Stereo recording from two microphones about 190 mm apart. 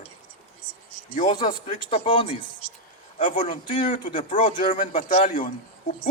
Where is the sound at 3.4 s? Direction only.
40° left (ahead or behind).